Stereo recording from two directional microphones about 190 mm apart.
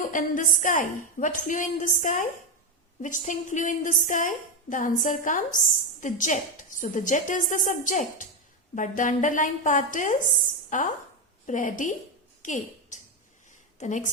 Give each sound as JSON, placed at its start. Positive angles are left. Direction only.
{"t": 0.1, "sound": "a woman's voice", "side_deg": 45}
{"t": 12.4, "sound": "a sound", "side_deg": 40}
{"t": 13.7, "sound": "a woman's voice", "side_deg": 40}